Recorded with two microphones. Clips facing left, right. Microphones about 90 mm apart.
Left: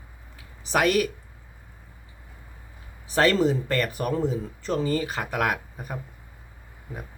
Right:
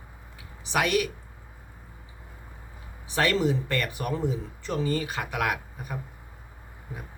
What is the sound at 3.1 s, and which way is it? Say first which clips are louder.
Speech: left 4 dB; 35° left (ahead or behind).